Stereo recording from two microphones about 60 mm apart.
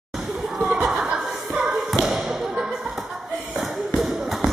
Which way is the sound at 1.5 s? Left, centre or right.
Centre.